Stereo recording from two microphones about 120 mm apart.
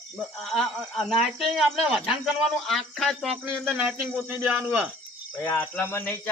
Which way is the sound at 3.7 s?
10° right (ahead or behind).